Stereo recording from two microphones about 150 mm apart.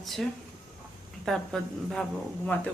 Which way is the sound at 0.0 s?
Centre (ahead or behind).